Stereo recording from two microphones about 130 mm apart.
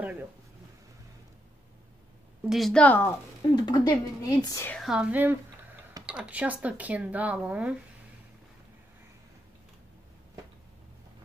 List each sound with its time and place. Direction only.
0.0 s a sound: 10° right (ahead or behind)
2.5 s a woman's voice: 5° left (ahead or behind); by 4.6 s 30° left (ahead or behind)
4.7 s speech: 5° right (ahead or behind)